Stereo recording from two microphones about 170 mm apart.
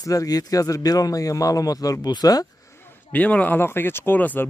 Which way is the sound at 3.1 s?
10° left (ahead or behind).